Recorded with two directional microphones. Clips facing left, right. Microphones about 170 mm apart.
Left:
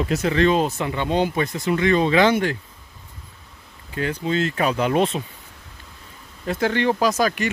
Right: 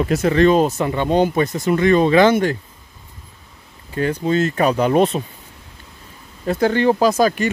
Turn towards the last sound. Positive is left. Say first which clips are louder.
# right 5 dB
turn(degrees=-35)  # may be behind; listen again after turning